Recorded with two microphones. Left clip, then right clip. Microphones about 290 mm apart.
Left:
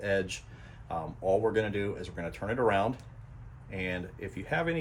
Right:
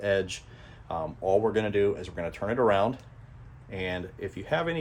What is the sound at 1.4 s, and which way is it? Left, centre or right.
Speech, centre.